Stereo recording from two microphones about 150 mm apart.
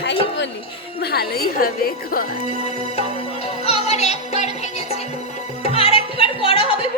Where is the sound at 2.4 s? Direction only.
45° left (ahead or behind).